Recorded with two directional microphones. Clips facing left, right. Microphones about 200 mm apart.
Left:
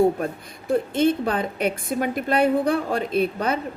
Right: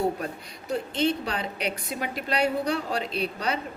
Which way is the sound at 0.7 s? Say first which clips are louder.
Left 6 dB; 50° left (ahead or behind).